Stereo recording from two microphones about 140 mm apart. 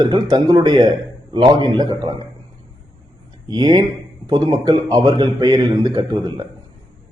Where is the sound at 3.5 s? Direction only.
30° right (ahead or behind).